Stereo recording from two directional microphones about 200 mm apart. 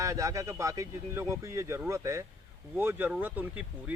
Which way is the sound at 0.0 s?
15° right (ahead or behind).